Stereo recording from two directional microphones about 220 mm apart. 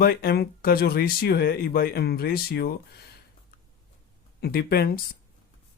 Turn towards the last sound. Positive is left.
turn(degrees=45)  # may be behind; listen again after turning